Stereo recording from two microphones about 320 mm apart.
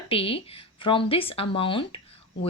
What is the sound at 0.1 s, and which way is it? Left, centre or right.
A woman's voice, centre.